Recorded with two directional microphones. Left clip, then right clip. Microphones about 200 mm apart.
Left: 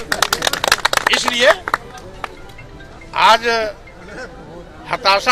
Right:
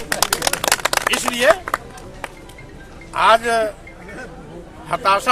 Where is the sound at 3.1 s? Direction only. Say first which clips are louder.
Left 2 dB; 15° right (ahead or behind).